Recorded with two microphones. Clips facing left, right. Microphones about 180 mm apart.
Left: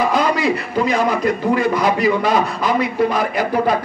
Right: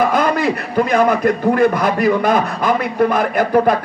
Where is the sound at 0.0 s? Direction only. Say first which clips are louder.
Right 2 dB; 55° right (ahead or behind).